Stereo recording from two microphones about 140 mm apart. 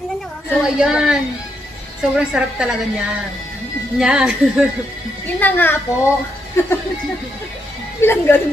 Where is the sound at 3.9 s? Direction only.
5° right (ahead or behind).